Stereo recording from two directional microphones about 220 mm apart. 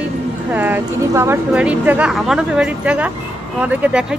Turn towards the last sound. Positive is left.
turn(degrees=-5)  # may be behind; listen again after turning